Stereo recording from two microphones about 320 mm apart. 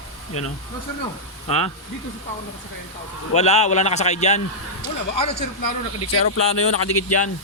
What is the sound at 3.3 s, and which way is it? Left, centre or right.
A man's voice, centre.